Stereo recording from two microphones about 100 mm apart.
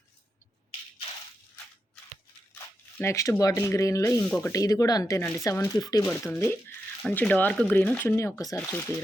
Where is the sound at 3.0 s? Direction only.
30° left (ahead or behind).